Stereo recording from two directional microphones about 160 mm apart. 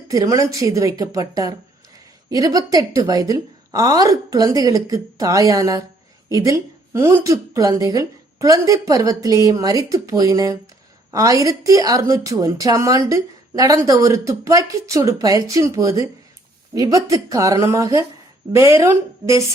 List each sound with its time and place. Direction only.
0.1 s a woman's voice: 20° right (ahead or behind)